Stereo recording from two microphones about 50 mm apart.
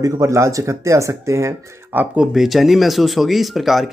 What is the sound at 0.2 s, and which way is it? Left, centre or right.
Speech, right.